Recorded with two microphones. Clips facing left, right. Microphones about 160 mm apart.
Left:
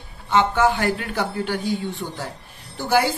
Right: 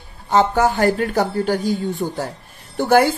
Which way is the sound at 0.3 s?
40° right (ahead or behind).